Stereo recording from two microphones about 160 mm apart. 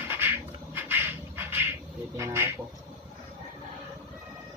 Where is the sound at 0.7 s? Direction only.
10° right (ahead or behind).